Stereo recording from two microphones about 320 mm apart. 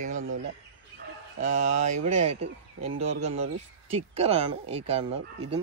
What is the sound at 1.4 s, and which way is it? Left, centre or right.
Speech, right.